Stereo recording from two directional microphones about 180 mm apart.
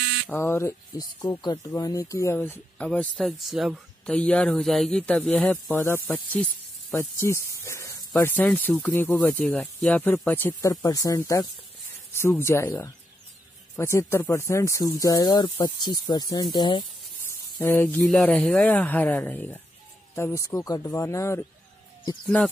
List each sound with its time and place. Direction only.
0.3 s speech: 15° left (ahead or behind)
17.6 s speech: 10° left (ahead or behind)
22.2 s speech: 5° left (ahead or behind)